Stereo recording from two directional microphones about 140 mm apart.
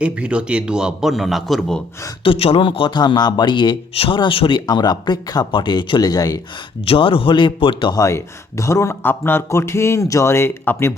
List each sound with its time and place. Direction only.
0.0 s a man's voice: 10° right (ahead or behind)
2.2 s a man's voice: 40° left (ahead or behind)
6.8 s a man's voice: 40° left (ahead or behind); by 10.9 s 15° left (ahead or behind)